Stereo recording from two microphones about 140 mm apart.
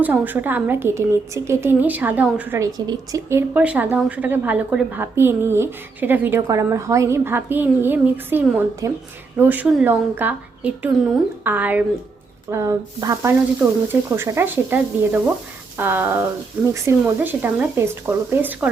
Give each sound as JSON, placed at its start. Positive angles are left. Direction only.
{"t": 0.0, "sound": "a woman's voice", "side_deg": -10}
{"t": 2.6, "sound": "a woman's voice", "side_deg": -25}